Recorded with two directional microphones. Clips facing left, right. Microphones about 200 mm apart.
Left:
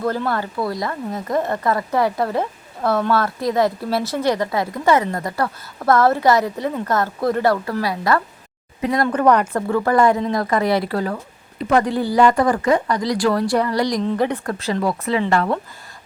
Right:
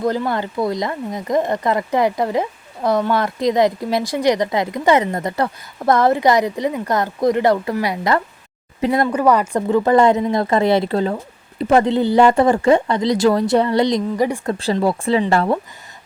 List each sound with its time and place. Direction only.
0.0 s speech: 15° right (ahead or behind)
9.0 s speech: 10° right (ahead or behind)
9.6 s speech: 20° right (ahead or behind)
14.0 s speech: 10° right (ahead or behind)
14.4 s speech: 25° right (ahead or behind)